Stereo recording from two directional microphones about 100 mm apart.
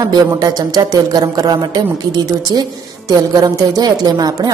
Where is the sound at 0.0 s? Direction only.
40° right (ahead or behind).